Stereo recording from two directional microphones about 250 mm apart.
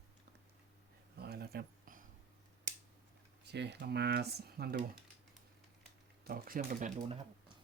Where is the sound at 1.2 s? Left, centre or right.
Right.